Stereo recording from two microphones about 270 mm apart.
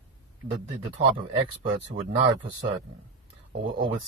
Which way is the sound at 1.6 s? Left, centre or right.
Centre.